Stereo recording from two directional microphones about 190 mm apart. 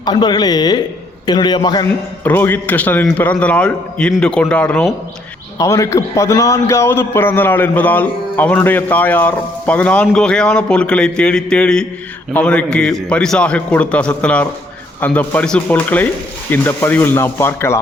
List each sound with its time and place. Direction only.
0.0 s speech: 20° left (ahead or behind)
2.2 s a man's voice: 10° left (ahead or behind)
5.5 s a man's voice: 15° left (ahead or behind)